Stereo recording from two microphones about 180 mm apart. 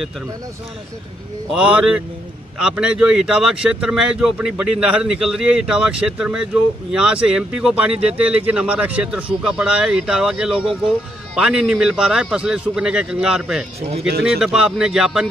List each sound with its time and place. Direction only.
1.5 s speech: 5° right (ahead or behind)
13.7 s speech: 35° right (ahead or behind)
14.4 s speech: 5° right (ahead or behind)